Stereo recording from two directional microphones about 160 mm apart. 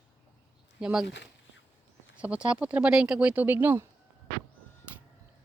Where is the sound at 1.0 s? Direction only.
90° left.